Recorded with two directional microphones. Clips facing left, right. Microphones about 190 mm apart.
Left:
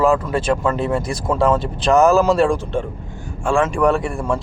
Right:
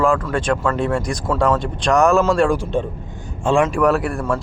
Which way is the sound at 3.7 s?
Centre (ahead or behind).